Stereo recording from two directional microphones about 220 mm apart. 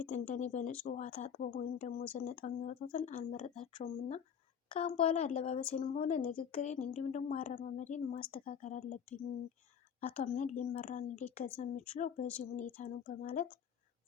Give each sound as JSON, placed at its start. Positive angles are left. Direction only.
{"t": 0.0, "sound": "a woman's voice", "side_deg": 30}
{"t": 10.1, "sound": "a woman's voice", "side_deg": 35}